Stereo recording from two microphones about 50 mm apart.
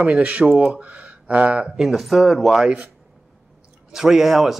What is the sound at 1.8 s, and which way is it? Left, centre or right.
Speech, centre.